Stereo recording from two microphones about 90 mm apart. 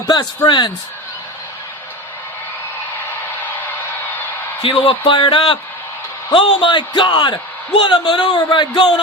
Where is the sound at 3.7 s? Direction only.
20° left (ahead or behind).